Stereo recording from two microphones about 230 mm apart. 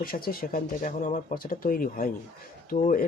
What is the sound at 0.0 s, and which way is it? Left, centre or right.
Speech, left.